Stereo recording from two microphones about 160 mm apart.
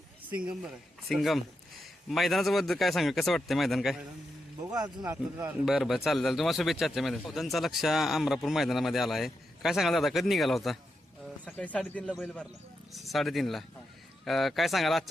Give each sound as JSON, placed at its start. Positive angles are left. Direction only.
{"t": 0.3, "sound": "a man's voice", "side_deg": -10}
{"t": 4.7, "sound": "speech", "side_deg": -20}
{"t": 5.6, "sound": "speech", "side_deg": 0}